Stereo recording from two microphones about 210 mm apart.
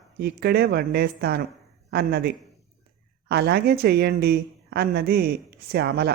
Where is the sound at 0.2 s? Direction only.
50° right (ahead or behind).